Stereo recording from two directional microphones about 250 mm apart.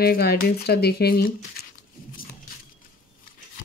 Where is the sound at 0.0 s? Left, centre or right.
Left.